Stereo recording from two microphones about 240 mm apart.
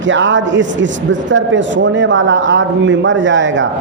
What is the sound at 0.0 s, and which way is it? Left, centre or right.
Speech, right.